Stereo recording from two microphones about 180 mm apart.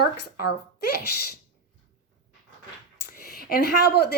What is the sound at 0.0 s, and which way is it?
Speech, 65° left (ahead or behind).